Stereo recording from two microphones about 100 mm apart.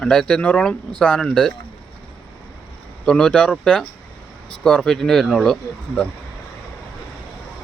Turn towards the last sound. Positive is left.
turn(degrees=5)  # may be behind; listen again after turning